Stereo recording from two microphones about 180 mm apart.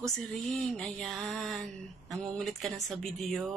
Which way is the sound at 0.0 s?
Centre (ahead or behind).